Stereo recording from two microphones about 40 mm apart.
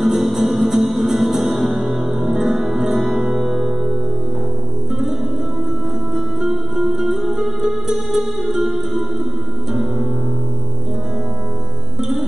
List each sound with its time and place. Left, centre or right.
0.0 s music: centre
6.1 s music: centre